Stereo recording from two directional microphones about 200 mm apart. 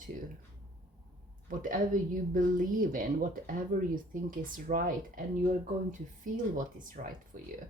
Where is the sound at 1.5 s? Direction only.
45° right (ahead or behind).